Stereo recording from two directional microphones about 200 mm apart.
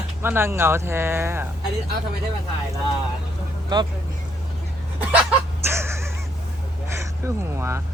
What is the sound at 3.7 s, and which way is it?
Speech, 20° right (ahead or behind).